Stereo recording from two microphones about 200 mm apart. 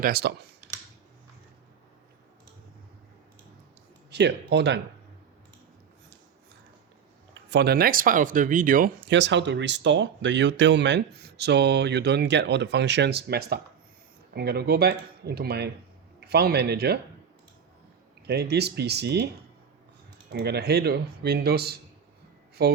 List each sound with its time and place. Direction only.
0.0 s speech: 50° right (ahead or behind)
4.1 s speech: 60° right (ahead or behind)
7.5 s speech: 55° right (ahead or behind)
9.0 s speech: 65° right (ahead or behind)
18.3 s speech: 55° right (ahead or behind)
20.3 s speech: 55° right (ahead or behind)